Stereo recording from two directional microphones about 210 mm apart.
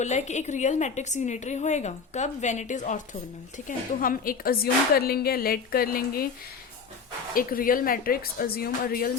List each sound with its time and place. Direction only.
0.0 s a woman's voice: 35° left (ahead or behind)
7.3 s a woman's voice: 40° left (ahead or behind)